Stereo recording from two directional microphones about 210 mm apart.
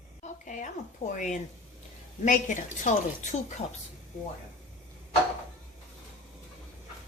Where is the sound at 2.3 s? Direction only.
35° left (ahead or behind).